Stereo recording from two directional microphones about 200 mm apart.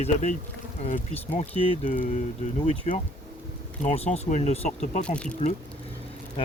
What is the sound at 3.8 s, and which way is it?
Speech, 35° left (ahead or behind).